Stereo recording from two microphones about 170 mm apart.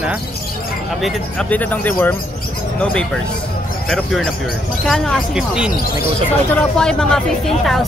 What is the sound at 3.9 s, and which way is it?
Speech, centre (ahead or behind).